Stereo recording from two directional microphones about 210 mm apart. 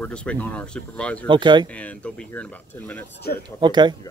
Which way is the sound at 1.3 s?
20° right (ahead or behind).